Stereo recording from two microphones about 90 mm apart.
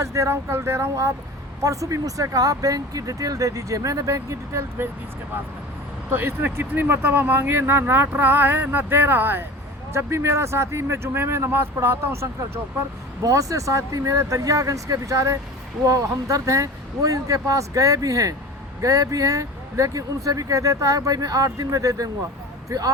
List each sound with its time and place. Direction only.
0.0 s speech: 35° right (ahead or behind)
6.1 s speech: 25° right (ahead or behind); by 22.1 s 40° right (ahead or behind)